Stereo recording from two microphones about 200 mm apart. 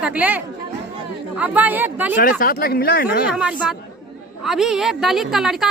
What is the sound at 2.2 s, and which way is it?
Speech, 45° left (ahead or behind).